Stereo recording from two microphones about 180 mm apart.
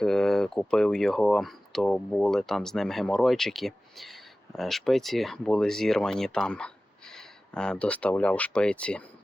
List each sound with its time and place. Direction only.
0.0 s speech: 5° left (ahead or behind)